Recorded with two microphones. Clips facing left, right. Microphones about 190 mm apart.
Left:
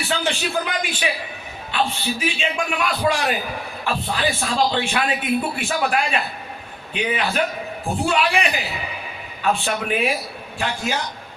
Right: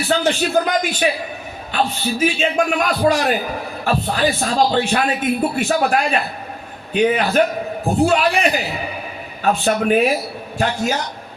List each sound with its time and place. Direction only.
0.1 s a man's voice: 40° right (ahead or behind)